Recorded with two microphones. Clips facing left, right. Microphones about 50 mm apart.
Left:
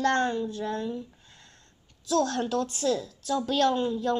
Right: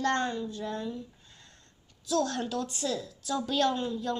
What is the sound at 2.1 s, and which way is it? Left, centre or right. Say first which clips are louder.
A woman's voice: left 3 dB; left.